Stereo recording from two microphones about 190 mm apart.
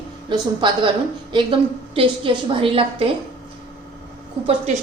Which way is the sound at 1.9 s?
25° right (ahead or behind).